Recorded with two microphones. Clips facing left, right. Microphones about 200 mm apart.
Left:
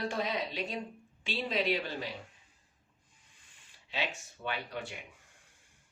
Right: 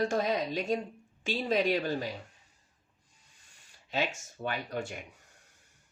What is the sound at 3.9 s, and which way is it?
Speech, 45° right (ahead or behind).